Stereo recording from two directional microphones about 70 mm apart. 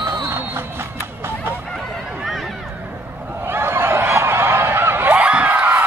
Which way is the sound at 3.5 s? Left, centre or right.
Right.